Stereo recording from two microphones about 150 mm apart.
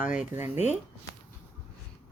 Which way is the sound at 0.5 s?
50° left (ahead or behind).